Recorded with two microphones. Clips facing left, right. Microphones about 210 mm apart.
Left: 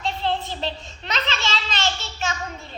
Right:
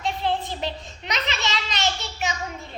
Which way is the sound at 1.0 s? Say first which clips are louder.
Left 1 dB; 15° right (ahead or behind).